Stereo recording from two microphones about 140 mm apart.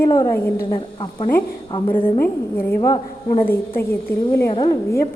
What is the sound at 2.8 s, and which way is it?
Speech, 25° left (ahead or behind).